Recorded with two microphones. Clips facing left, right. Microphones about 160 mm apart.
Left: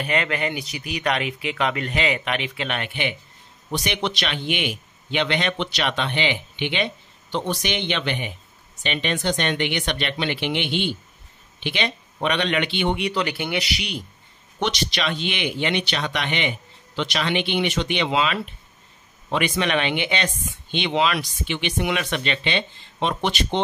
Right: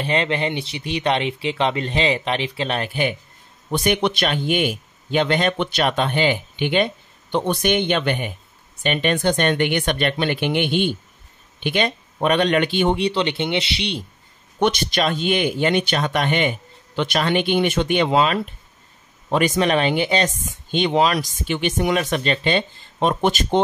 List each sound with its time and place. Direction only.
0.0 s a man's voice: 30° right (ahead or behind)
14.6 s a man's voice: 50° right (ahead or behind)